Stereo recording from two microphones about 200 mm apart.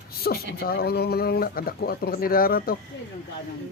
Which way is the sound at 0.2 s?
50° left (ahead or behind).